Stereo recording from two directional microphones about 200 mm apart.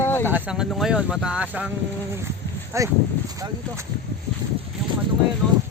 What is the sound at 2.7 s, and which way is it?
Speech, 15° right (ahead or behind).